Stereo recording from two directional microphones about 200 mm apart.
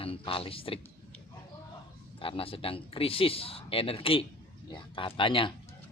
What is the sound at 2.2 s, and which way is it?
Speech, 25° left (ahead or behind).